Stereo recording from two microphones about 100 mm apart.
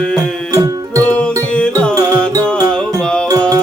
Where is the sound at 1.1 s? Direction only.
10° left (ahead or behind).